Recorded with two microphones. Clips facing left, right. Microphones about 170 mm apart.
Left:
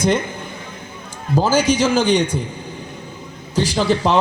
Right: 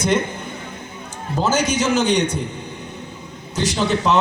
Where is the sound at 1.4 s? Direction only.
30° left (ahead or behind).